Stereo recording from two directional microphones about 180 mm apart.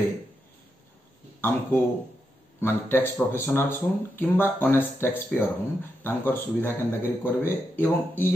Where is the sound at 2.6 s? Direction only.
10° left (ahead or behind).